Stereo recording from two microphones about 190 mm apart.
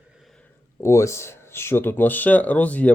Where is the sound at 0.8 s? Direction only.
15° left (ahead or behind).